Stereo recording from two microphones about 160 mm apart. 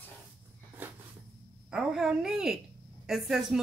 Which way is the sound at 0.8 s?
10° right (ahead or behind).